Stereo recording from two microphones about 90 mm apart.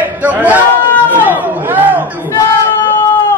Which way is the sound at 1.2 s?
20° right (ahead or behind).